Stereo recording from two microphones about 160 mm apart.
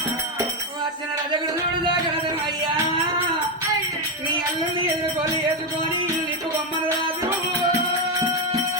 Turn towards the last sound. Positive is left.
turn(degrees=-15)  # may be behind; listen again after turning